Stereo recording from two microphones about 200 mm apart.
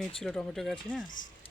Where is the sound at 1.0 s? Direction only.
40° left (ahead or behind).